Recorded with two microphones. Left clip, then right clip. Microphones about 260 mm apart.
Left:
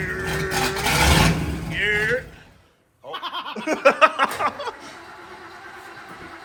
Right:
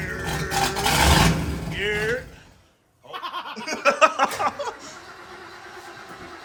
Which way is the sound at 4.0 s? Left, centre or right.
Centre.